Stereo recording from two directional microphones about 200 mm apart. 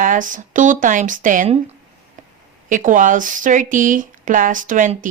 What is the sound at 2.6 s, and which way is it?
Speech, 40° right (ahead or behind).